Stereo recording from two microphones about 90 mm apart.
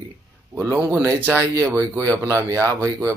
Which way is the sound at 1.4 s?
40° right (ahead or behind).